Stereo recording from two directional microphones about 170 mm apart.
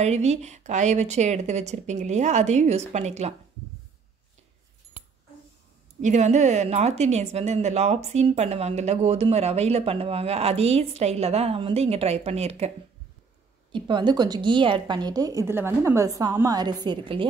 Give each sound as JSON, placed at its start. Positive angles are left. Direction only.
{"t": 0.0, "sound": "speech", "side_deg": -40}
{"t": 5.9, "sound": "a woman's voice", "side_deg": -45}